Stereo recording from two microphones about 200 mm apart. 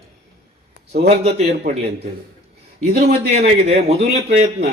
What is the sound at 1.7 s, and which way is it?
Speech, 50° right (ahead or behind).